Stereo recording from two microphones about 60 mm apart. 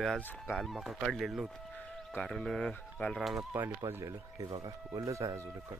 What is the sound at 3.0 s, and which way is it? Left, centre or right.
Speech, left.